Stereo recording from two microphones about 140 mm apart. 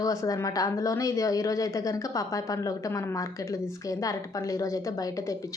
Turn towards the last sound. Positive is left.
turn(degrees=25)  # may be behind; listen again after turning